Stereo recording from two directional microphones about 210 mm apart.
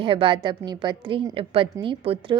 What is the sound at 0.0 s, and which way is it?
A woman's voice, 25° right (ahead or behind).